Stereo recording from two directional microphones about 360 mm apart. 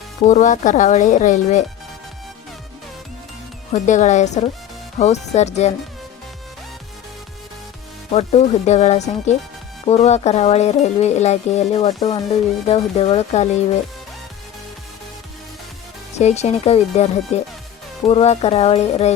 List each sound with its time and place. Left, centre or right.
0.3 s speech: centre
3.7 s speech: centre
8.1 s speech: centre
16.1 s speech: centre